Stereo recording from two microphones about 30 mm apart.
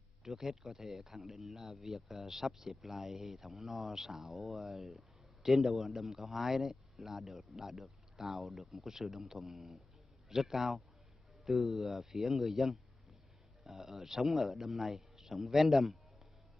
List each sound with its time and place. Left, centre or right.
0.2 s a man's voice: centre
9.4 s a man's voice: centre